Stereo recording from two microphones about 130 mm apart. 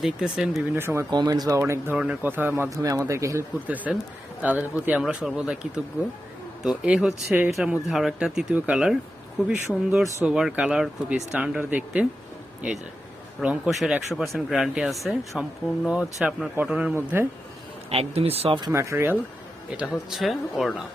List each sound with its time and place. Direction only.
0.0 s speech: 5° right (ahead or behind)
0.8 s a man's voice: 20° right (ahead or behind)
1.1 s a man's voice: 35° right (ahead or behind)
2.0 s a man's voice: 10° right (ahead or behind)
3.9 s speech: 10° right (ahead or behind)
7.6 s speech: 5° right (ahead or behind)
13.4 s speech: 5° right (ahead or behind)
17.9 s speech: 50° right (ahead or behind)
18.7 s a man's voice: 20° right (ahead or behind)
19.7 s speech: 5° right (ahead or behind)